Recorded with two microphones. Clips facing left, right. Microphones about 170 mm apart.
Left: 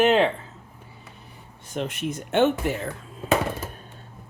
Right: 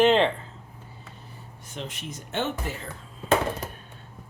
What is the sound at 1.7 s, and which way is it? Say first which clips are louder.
Speech: left 8 dB; 55° left (ahead or behind).